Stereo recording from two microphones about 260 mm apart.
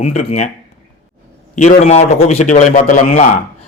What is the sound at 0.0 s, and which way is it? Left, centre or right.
Speech, left.